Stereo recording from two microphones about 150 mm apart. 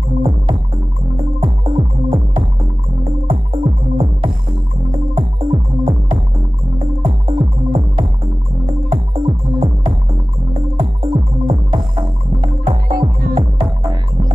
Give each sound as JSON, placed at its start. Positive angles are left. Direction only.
{"t": 1.1, "sound": "music", "side_deg": -35}
{"t": 8.9, "sound": "music", "side_deg": -35}